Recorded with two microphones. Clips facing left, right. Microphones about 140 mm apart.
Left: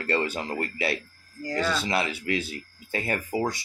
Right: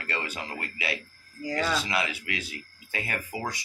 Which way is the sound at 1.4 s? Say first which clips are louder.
Left 1 dB; 5° right (ahead or behind).